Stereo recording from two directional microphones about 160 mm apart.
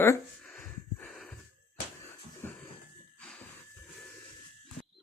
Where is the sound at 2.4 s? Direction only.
15° left (ahead or behind).